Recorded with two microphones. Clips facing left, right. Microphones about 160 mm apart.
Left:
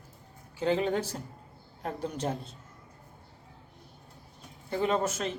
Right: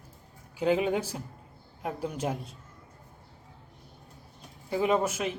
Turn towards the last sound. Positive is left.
turn(degrees=-10)  # may be behind; listen again after turning